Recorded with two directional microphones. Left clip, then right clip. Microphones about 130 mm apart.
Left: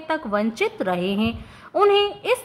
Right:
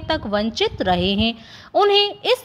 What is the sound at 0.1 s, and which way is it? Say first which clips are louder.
A woman's voice: right 2 dB; 30° right (ahead or behind).